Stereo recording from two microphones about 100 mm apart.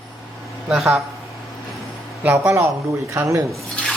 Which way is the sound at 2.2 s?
20° right (ahead or behind).